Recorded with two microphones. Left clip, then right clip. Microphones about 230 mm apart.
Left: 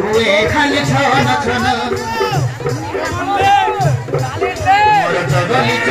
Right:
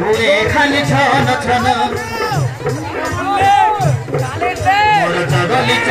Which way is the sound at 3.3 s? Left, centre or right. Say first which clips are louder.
Right 1 dB; centre.